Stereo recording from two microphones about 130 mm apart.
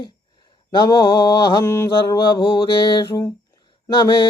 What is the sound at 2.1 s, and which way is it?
Speech, 35° left (ahead or behind).